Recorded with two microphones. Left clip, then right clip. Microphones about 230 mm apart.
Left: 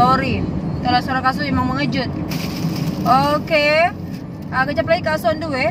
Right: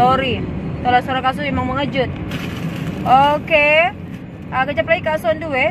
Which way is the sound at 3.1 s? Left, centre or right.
Left.